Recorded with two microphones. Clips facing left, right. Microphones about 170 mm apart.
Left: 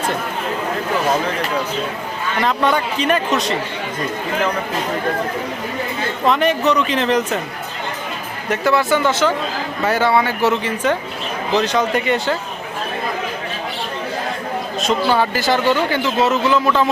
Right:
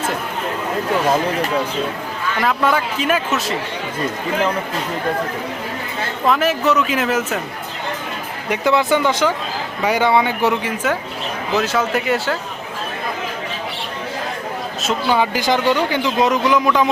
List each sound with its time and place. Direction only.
2.4 s a man's voice: 5° right (ahead or behind)
6.2 s a man's voice: 5° right (ahead or behind)
8.4 s a man's voice: 20° right (ahead or behind)
14.8 s speech: 5° right (ahead or behind)
15.2 s speech: 15° right (ahead or behind)